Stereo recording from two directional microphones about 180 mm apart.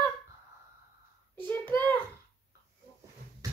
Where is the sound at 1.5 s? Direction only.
10° left (ahead or behind).